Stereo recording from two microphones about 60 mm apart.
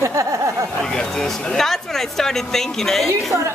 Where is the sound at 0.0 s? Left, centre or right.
Right.